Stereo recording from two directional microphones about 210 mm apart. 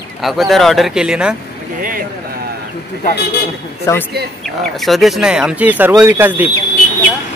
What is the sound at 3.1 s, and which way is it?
Speech, 50° left (ahead or behind).